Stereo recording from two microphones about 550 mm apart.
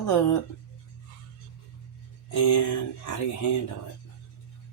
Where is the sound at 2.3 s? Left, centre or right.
Left.